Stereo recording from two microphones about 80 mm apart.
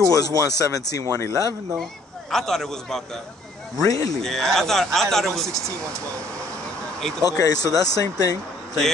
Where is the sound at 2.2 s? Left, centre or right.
Centre.